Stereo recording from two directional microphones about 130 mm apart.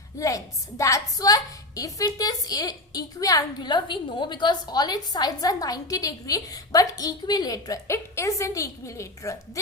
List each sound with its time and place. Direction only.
0.2 s a woman's voice: 25° left (ahead or behind)